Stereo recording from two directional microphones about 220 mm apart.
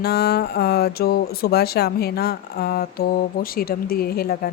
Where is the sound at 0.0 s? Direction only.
45° left (ahead or behind).